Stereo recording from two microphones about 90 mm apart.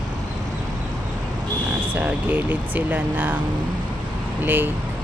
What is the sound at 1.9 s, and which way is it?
Speech, 20° right (ahead or behind).